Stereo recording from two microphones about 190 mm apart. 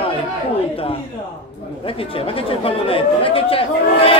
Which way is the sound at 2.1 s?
30° left (ahead or behind).